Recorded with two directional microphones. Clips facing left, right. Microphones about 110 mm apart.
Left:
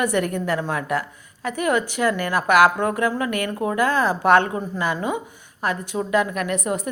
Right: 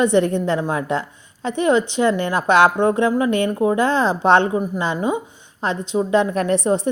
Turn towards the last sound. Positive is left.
turn(degrees=-30)  # may be behind; listen again after turning